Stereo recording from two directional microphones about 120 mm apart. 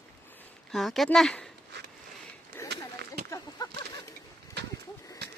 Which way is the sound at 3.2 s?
25° left (ahead or behind).